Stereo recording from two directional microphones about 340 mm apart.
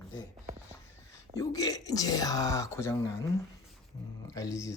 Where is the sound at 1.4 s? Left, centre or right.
Centre.